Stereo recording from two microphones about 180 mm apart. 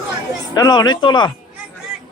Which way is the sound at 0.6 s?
20° left (ahead or behind).